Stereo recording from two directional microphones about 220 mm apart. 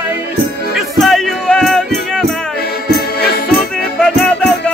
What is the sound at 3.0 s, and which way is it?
Music, 45° left (ahead or behind).